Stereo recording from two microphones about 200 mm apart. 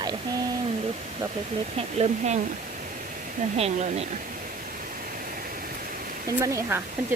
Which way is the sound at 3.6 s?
30° right (ahead or behind).